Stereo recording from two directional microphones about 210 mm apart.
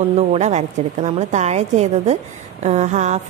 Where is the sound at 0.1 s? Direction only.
30° right (ahead or behind).